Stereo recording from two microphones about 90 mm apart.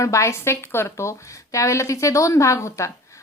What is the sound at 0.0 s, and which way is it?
A woman's voice, 35° left (ahead or behind).